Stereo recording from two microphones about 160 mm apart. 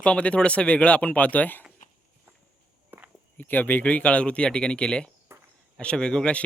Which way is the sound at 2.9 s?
15° right (ahead or behind).